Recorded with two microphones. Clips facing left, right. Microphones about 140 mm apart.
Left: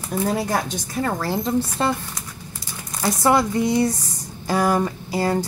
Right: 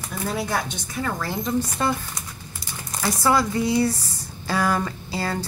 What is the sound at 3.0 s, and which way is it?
A woman's voice, 20° left (ahead or behind).